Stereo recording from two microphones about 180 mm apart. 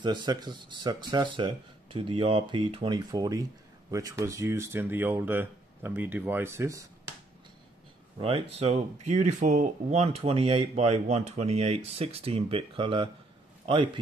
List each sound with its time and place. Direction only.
0.0 s speech: 25° right (ahead or behind)
8.2 s speech: 35° right (ahead or behind)